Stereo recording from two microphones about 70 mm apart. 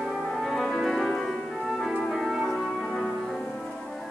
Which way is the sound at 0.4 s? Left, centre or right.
Centre.